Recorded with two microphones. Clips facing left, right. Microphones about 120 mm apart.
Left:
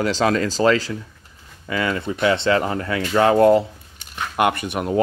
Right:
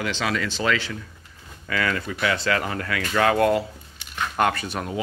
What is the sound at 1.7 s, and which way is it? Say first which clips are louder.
Speech: left 3 dB; 25° left (ahead or behind).